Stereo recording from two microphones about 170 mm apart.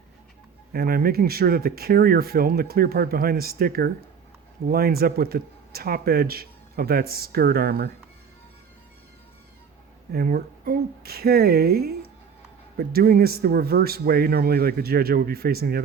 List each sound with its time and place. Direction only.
0.7 s speech: 60° right (ahead or behind)
10.1 s speech: 65° right (ahead or behind)